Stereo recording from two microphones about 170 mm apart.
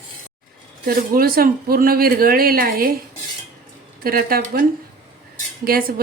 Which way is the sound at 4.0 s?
60° right (ahead or behind).